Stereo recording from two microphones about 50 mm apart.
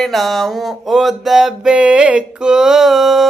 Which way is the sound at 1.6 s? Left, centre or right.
Right.